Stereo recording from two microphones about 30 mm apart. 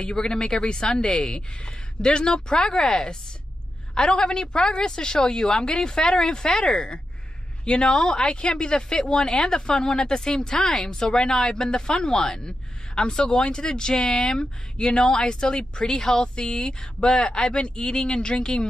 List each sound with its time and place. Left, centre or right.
0.0 s speech: left
4.2 s speech: left
17.0 s speech: left